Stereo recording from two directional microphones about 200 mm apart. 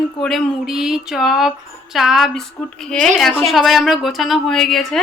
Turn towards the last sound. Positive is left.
turn(degrees=0)  # may be behind; listen again after turning